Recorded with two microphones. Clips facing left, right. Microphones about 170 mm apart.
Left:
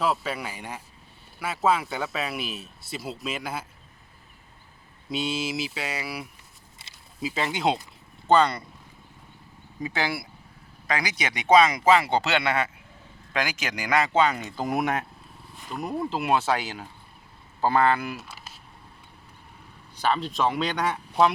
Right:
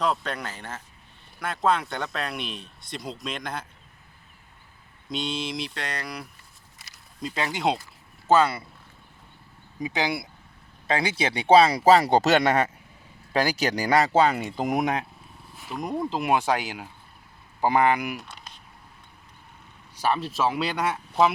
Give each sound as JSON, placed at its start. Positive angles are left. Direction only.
{"t": 0.0, "sound": "speech", "side_deg": 5}
{"t": 5.0, "sound": "speech", "side_deg": 5}
{"t": 6.8, "sound": "a sound", "side_deg": 30}
{"t": 7.2, "sound": "speech", "side_deg": 5}
{"t": 9.8, "sound": "speech", "side_deg": -15}
{"t": 10.8, "sound": "speech", "side_deg": -30}
{"t": 15.5, "sound": "speech", "side_deg": -5}
{"t": 18.2, "sound": "a sound", "side_deg": 5}
{"t": 20.0, "sound": "speech", "side_deg": -10}